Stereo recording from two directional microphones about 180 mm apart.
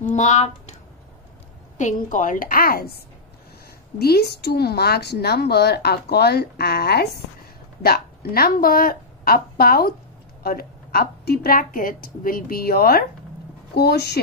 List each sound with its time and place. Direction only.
0.0 s speech: 40° left (ahead or behind)
1.8 s a woman's voice: 45° left (ahead or behind)
4.0 s a woman's voice: 60° left (ahead or behind)